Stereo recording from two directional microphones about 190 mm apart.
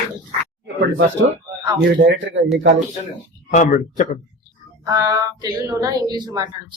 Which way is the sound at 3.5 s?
40° left (ahead or behind).